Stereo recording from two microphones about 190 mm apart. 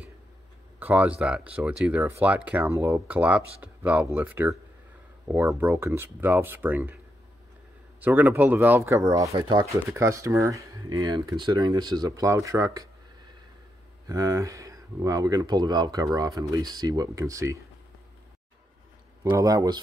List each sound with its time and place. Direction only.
0.7 s speech: 10° right (ahead or behind)
8.0 s speech: 10° right (ahead or behind)
14.0 s speech: 15° right (ahead or behind)
19.2 s speech: 20° right (ahead or behind)